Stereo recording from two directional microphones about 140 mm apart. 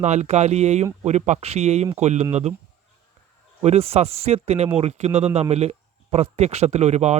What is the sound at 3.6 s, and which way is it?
Speech, 50° right (ahead or behind).